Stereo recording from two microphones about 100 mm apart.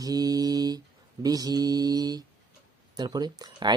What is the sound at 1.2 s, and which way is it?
Speech, 40° right (ahead or behind).